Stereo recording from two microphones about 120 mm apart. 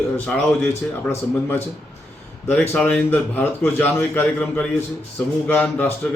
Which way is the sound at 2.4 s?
20° left (ahead or behind).